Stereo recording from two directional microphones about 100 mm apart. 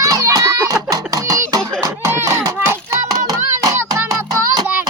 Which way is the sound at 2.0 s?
25° right (ahead or behind).